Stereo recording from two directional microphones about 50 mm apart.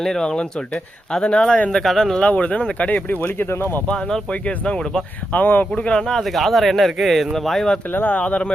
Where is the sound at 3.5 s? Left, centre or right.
Left.